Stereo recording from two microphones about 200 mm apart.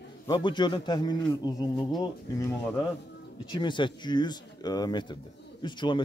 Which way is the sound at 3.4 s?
20° left (ahead or behind).